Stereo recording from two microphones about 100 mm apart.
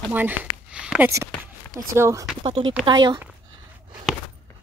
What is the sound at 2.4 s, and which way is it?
Speech, 55° right (ahead or behind).